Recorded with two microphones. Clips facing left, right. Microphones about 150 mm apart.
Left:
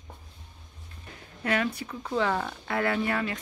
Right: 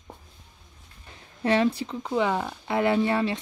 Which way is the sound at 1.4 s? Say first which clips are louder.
Right 6 dB; 25° right (ahead or behind).